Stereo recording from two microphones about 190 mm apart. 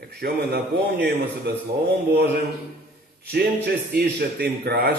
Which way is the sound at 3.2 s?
55° right (ahead or behind).